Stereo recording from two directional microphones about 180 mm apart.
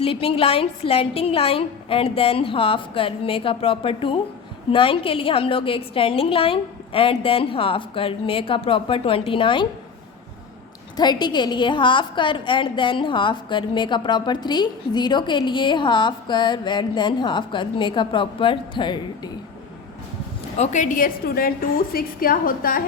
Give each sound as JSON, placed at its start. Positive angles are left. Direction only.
{"t": 0.0, "sound": "a woman's voice", "side_deg": 30}
{"t": 10.9, "sound": "a woman's voice", "side_deg": 25}
{"t": 20.6, "sound": "a woman's voice", "side_deg": 40}